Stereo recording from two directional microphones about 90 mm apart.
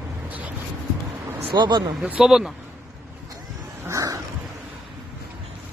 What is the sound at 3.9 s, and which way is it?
Dog, 40° right (ahead or behind).